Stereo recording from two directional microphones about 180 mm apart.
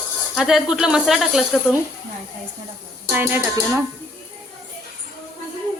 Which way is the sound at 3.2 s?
10° right (ahead or behind).